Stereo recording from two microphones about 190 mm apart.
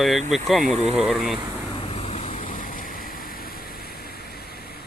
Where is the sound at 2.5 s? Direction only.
45° left (ahead or behind).